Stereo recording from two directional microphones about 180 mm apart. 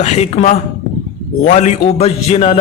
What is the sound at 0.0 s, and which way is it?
A man's voice, 40° left (ahead or behind).